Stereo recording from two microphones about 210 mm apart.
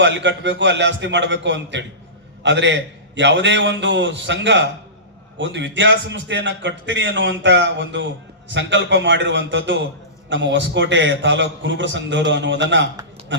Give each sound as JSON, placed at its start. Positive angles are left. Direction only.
{"t": 0.0, "sound": "a man's voice", "side_deg": -60}